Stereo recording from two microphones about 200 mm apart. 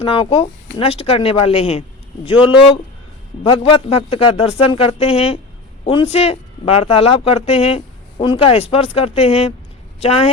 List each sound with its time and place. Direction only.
0.0 s a woman's voice: 25° left (ahead or behind)